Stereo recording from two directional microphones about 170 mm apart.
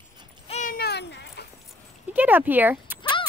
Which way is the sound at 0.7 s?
75° left (ahead or behind).